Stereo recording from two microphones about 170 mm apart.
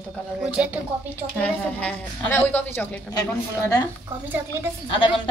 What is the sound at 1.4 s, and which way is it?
A woman's voice, 10° left (ahead or behind).